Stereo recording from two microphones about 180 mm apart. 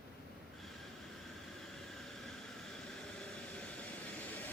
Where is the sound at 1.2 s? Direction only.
Centre (ahead or behind).